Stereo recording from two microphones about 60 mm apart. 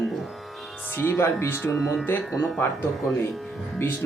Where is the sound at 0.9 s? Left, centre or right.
Left.